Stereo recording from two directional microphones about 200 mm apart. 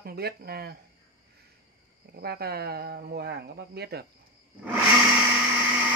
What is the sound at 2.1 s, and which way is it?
Speech, 50° right (ahead or behind).